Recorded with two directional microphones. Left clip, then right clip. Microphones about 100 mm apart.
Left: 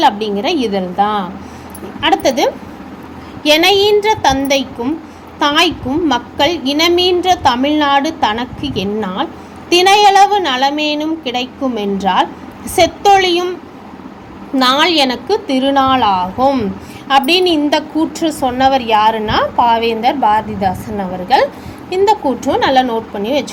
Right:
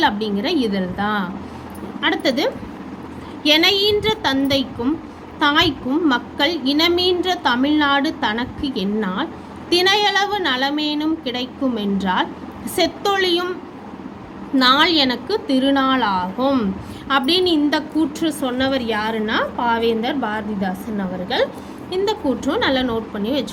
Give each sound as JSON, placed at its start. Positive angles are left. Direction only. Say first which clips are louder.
{"t": 0.0, "sound": "a woman's voice", "louder": "left 6 dB", "side_deg": 25}
{"t": 2.0, "sound": "a woman's voice", "louder": "left 7 dB", "side_deg": 40}
{"t": 14.5, "sound": "a woman's voice", "louder": "left 3 dB", "side_deg": 30}
{"t": 17.1, "sound": "a woman's voice", "louder": "left 6 dB", "side_deg": 40}
{"t": 19.9, "sound": "a woman's voice", "louder": "left 9 dB", "side_deg": 45}
{"t": 21.8, "sound": "a woman's voice", "louder": "left 8 dB", "side_deg": 40}